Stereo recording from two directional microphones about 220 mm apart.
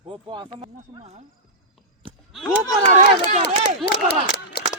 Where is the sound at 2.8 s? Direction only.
30° right (ahead or behind).